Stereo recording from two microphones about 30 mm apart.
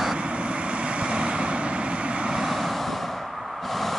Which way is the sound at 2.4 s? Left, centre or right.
Centre.